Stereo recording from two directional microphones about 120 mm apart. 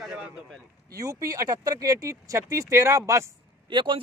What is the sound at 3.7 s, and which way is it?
Speech, 45° right (ahead or behind).